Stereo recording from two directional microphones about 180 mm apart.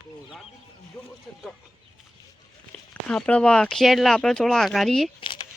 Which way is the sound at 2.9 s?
5° left (ahead or behind).